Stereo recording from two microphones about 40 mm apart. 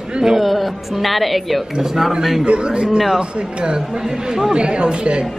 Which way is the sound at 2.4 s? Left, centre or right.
Right.